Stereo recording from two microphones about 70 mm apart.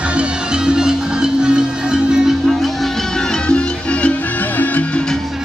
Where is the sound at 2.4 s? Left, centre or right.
Centre; by 5.0 s left.